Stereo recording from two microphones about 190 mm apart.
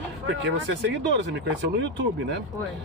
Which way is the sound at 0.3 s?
75° right (ahead or behind).